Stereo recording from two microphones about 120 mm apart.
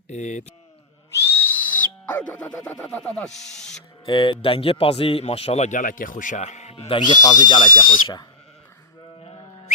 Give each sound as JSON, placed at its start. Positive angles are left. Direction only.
{"t": 0.1, "sound": "speech", "side_deg": 85}
{"t": 1.1, "sound": "owl", "side_deg": 20}
{"t": 4.0, "sound": "a man's voice", "side_deg": 40}
{"t": 7.1, "sound": "speech", "side_deg": 30}